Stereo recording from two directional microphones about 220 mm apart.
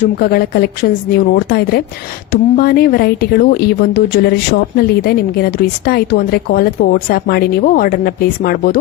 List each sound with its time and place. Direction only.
0.0 s speech: 45° left (ahead or behind)